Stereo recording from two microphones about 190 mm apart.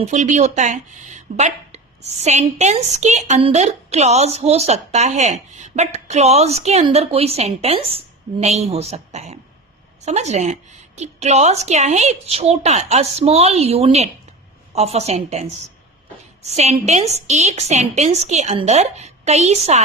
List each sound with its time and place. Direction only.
0.0 s speech: 40° right (ahead or behind)